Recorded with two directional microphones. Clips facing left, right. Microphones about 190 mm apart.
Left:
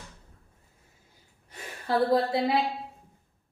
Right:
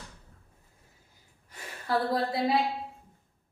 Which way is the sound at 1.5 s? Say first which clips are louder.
Left 2 dB; 20° left (ahead or behind).